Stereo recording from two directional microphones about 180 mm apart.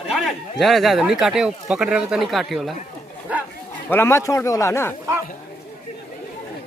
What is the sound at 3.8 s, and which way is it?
Speech, 15° left (ahead or behind).